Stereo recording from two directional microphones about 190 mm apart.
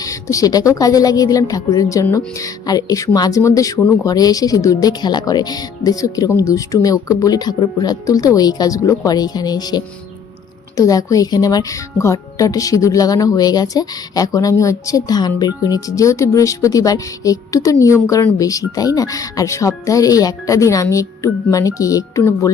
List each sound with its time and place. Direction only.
0.0 s a woman's voice: 15° left (ahead or behind)